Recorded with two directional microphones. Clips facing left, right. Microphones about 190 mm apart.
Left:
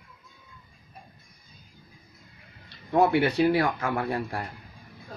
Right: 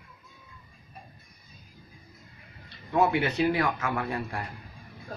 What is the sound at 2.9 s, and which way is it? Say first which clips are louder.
Speech: left 3 dB; 35° left (ahead or behind).